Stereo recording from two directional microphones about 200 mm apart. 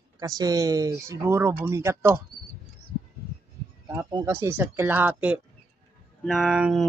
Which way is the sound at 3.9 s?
20° right (ahead or behind).